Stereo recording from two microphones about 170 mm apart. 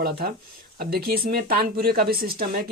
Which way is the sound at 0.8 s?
60° right (ahead or behind).